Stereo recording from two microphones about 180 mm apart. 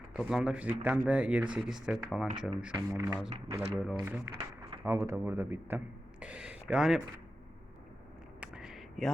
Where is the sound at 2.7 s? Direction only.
20° right (ahead or behind).